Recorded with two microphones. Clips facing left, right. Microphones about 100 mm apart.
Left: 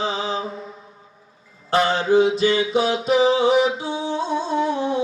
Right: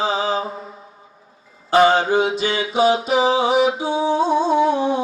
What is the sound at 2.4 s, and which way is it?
Music, 85° right.